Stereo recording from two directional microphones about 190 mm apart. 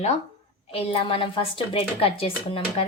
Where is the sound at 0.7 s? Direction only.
30° left (ahead or behind).